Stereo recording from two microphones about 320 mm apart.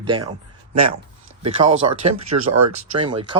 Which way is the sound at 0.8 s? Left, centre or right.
Right.